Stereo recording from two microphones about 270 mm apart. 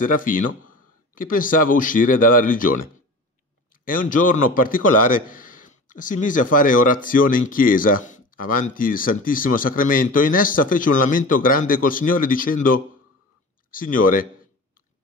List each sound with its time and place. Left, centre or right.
0.0 s a man's voice: left
3.8 s a man's voice: left
13.7 s a man's voice: left